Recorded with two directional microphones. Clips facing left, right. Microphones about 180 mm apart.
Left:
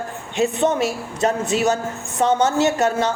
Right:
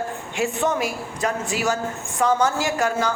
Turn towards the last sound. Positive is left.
turn(degrees=25)  # may be behind; listen again after turning